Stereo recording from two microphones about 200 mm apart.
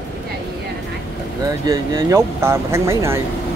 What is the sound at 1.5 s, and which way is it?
Speech, 15° right (ahead or behind).